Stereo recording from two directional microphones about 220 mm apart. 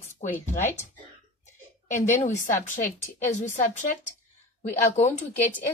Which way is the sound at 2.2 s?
35° left (ahead or behind).